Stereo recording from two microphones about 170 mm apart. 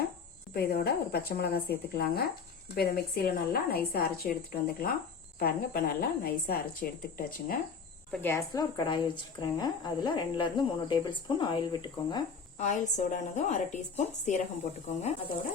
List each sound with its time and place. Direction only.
0.5 s a woman's voice: 65° left (ahead or behind)
8.1 s speech: 10° left (ahead or behind)
8.5 s a woman's voice: 25° left (ahead or behind)
12.5 s a woman's voice: 45° left (ahead or behind)